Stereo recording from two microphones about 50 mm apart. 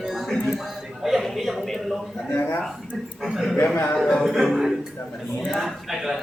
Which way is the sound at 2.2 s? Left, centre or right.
Left.